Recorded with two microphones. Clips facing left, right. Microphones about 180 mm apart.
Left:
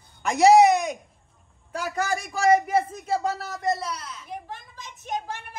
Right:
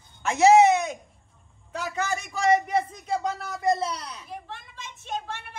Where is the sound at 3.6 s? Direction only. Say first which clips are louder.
Right 3 dB; 15° right (ahead or behind).